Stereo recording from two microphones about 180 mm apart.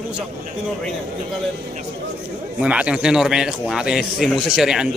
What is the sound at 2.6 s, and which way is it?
A man's voice, 5° right (ahead or behind).